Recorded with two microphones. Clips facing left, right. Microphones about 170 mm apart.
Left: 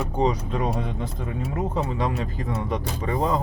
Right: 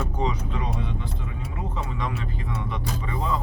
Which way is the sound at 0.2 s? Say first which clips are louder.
Left 7 dB; 40° left (ahead or behind).